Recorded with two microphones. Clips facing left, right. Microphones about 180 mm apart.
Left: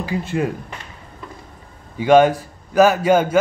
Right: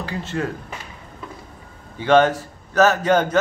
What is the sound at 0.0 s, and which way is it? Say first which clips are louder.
Speech: left 4 dB; 15° left (ahead or behind).